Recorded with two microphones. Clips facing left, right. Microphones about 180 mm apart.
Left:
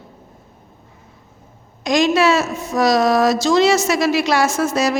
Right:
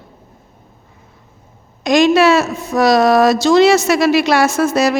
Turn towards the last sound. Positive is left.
turn(degrees=-65)  # may be behind; listen again after turning